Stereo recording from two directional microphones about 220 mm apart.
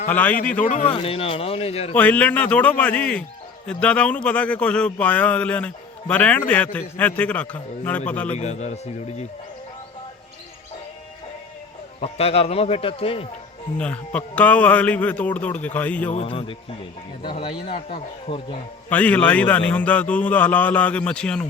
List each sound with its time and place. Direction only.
0.1 s a man's voice: 10° left (ahead or behind)
0.7 s speech: 35° left (ahead or behind)
2.0 s a man's voice: 5° left (ahead or behind)
8.3 s speech: 30° left (ahead or behind)
11.9 s speech: 25° left (ahead or behind)
13.7 s a man's voice: 5° left (ahead or behind)
16.1 s speech: 25° left (ahead or behind)
18.9 s a man's voice: 5° left (ahead or behind)